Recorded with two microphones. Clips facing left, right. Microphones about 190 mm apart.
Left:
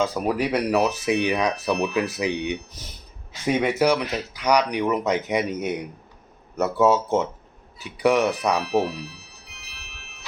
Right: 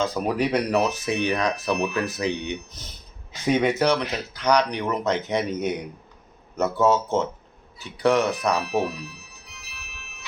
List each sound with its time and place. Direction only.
0.0 s speech: 5° left (ahead or behind)
8.6 s speech: 55° right (ahead or behind)